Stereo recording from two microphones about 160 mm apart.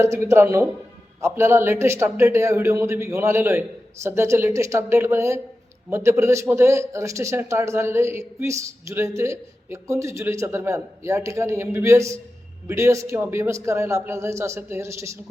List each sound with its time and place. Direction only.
0.0 s speech: 15° right (ahead or behind)